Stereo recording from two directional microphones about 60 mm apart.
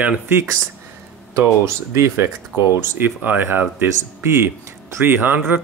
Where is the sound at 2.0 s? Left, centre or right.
Right.